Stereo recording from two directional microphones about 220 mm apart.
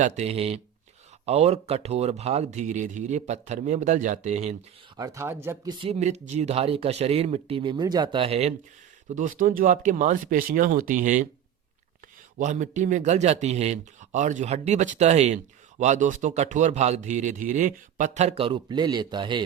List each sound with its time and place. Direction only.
0.0 s speech: 30° right (ahead or behind)
4.9 s speech: 15° right (ahead or behind)
5.8 s speech: 30° right (ahead or behind)
12.4 s speech: 35° right (ahead or behind)